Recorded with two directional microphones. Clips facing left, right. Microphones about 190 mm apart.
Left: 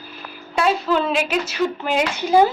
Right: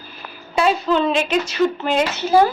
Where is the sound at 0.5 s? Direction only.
Centre (ahead or behind); by 2.5 s 15° left (ahead or behind).